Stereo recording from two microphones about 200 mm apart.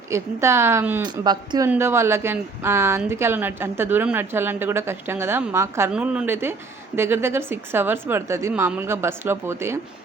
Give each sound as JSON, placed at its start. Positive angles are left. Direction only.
{"t": 0.1, "sound": "speech", "side_deg": -15}